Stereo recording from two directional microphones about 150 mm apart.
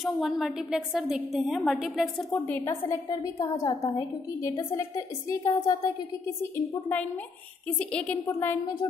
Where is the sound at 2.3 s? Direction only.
20° left (ahead or behind).